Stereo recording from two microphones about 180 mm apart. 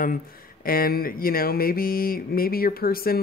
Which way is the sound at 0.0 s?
50° left (ahead or behind).